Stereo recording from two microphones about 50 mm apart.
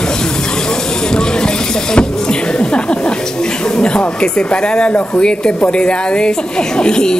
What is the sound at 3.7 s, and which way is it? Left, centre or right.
Speech, centre.